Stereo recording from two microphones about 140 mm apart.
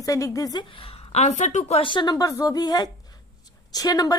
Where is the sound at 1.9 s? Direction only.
30° left (ahead or behind).